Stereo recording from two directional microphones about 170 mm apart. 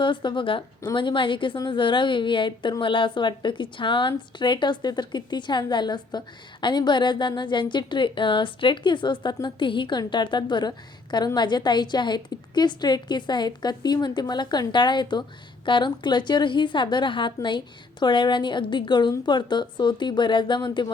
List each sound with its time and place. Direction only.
0.0 s a woman's voice: 30° left (ahead or behind)